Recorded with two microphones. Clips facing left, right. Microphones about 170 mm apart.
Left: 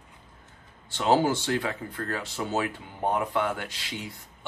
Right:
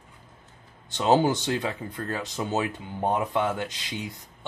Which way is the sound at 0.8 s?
20° right (ahead or behind).